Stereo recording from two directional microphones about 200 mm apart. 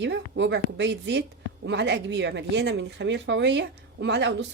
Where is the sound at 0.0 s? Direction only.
60° right (ahead or behind).